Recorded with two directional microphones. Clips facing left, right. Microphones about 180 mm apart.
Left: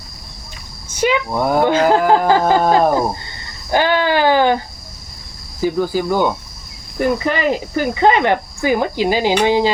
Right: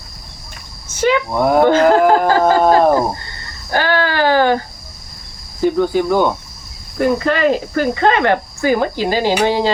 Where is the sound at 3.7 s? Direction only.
15° left (ahead or behind).